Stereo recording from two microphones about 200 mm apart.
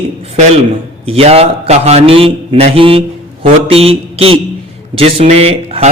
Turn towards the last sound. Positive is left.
turn(degrees=-30)  # may be behind; listen again after turning